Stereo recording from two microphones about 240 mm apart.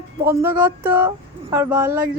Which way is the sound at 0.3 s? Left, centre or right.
Centre.